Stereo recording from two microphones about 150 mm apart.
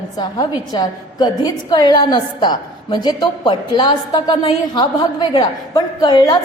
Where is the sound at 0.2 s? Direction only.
25° left (ahead or behind).